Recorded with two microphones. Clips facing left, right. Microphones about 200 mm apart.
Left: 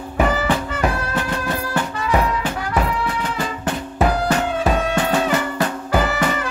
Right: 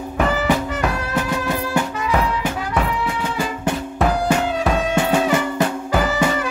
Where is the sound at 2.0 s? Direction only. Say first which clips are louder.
Left 1 dB; centre (ahead or behind).